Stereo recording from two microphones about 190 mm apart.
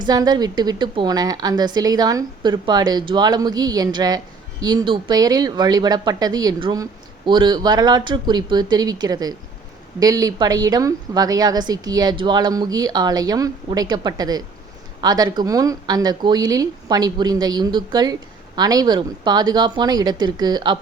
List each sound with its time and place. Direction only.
0.0 s speech: 20° right (ahead or behind)